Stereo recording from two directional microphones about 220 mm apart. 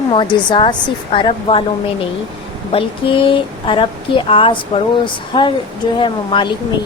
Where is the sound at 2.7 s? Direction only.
25° left (ahead or behind).